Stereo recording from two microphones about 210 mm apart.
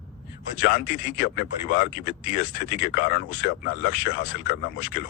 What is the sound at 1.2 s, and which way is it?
Speech, 45° left (ahead or behind).